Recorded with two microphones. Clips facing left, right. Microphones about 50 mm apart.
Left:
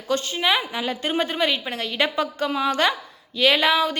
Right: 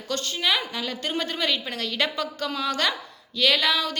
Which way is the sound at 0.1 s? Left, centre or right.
Centre.